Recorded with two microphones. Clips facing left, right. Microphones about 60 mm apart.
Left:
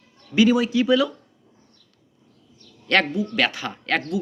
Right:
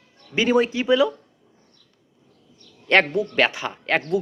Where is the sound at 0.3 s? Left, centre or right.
Right.